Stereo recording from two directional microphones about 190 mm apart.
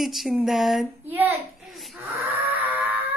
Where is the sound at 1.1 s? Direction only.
5° right (ahead or behind).